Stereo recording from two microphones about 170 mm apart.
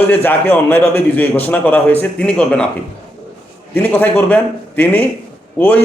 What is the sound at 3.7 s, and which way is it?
A man's voice, 10° left (ahead or behind).